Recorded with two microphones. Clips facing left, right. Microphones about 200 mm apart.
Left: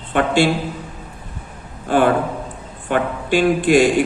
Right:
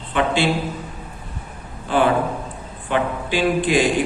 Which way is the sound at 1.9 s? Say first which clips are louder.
Left 2 dB; 45° left (ahead or behind).